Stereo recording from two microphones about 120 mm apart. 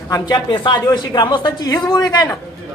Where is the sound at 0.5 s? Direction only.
40° left (ahead or behind).